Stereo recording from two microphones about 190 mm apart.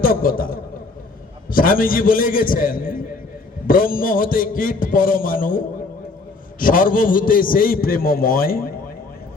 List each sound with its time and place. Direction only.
0.0 s a man's voice: 50° left (ahead or behind)